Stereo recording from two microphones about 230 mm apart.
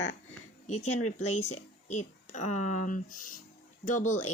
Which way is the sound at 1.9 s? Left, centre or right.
Left.